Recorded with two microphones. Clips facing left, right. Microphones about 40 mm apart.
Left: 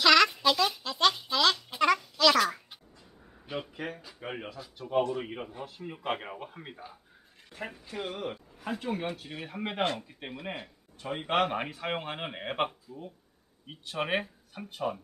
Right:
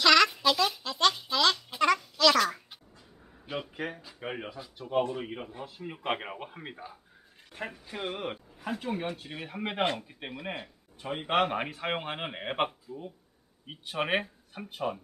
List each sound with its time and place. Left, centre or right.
0.0 s a sound: centre
3.7 s a sound: centre
4.2 s a man's voice: centre
5.1 s speech: centre
6.0 s a man's voice: centre
7.8 s speech: centre
8.5 s a man's voice: centre